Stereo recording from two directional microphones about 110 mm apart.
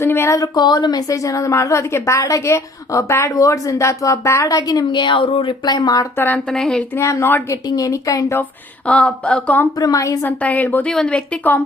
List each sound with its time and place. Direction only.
0.0 s a woman's voice: 25° left (ahead or behind)
6.1 s speech: 15° left (ahead or behind)
6.5 s a sound: 5° left (ahead or behind)
6.9 s a woman's voice: 25° left (ahead or behind)
8.9 s speech: 10° left (ahead or behind)
9.7 s a woman's voice: 35° left (ahead or behind)
10.2 s speech: 15° left (ahead or behind)